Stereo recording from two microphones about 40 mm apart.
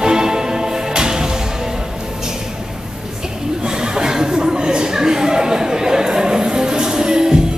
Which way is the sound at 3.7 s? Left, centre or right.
Centre.